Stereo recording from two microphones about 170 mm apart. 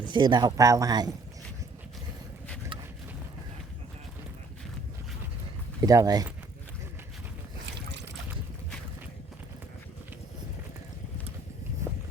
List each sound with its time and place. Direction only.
0.0 s speech: 25° right (ahead or behind)
5.8 s speech: 20° right (ahead or behind)
7.8 s boat: 85° right